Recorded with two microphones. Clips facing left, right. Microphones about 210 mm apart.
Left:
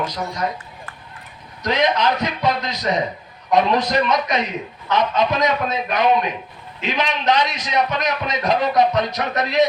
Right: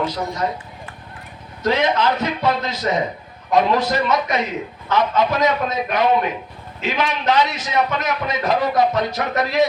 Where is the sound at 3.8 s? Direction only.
15° left (ahead or behind).